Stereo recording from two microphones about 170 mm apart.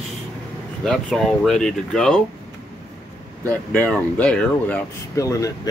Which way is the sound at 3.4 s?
10° left (ahead or behind).